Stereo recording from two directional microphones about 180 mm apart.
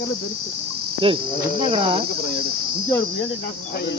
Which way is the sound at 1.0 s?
30° right (ahead or behind).